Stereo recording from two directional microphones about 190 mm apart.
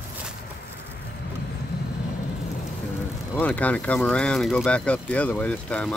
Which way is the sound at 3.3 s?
10° left (ahead or behind).